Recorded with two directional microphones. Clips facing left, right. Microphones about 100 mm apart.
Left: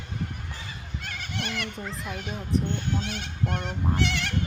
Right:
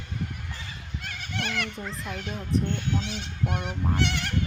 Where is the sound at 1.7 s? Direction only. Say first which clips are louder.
Even; centre (ahead or behind).